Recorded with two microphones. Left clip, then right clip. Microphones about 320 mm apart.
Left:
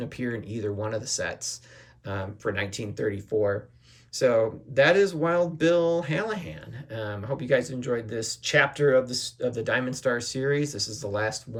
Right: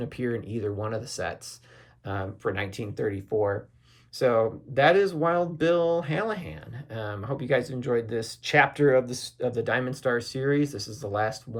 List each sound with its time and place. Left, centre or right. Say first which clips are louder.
0.0 s speech: right 2 dB; centre
9.0 s speech: left 4 dB; centre
9.4 s speech: right 1 dB; centre